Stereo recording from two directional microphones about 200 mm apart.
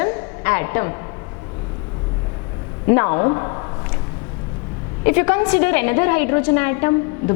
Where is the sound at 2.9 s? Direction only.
15° left (ahead or behind).